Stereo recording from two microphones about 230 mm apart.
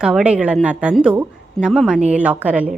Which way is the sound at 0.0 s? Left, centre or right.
Centre.